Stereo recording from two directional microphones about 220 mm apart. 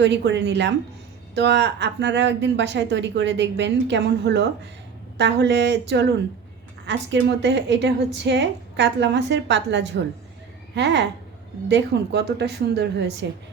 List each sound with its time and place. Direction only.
0.0 s a woman's voice: 55° right (ahead or behind)